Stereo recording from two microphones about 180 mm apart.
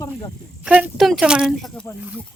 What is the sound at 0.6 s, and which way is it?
Speech, 5° right (ahead or behind).